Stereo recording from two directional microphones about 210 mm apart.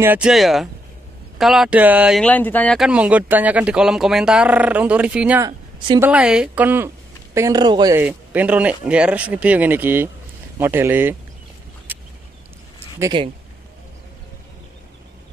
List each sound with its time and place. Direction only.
0.0 s speech: 5° right (ahead or behind)
2.2 s speech: 10° left (ahead or behind); by 11.1 s 10° right (ahead or behind)
13.0 s speech: 20° right (ahead or behind)